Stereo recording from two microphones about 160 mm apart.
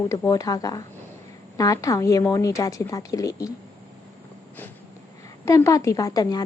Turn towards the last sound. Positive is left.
turn(degrees=25)  # may be behind; listen again after turning